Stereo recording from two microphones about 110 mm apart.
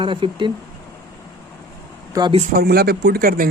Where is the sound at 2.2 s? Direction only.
30° right (ahead or behind).